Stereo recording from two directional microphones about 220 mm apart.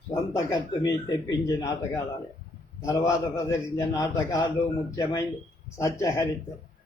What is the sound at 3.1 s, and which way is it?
Speech, 15° left (ahead or behind).